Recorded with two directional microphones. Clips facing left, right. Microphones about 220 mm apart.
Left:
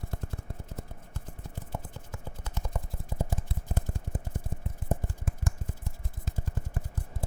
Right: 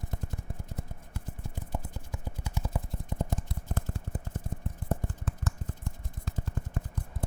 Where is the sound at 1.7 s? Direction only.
15° right (ahead or behind).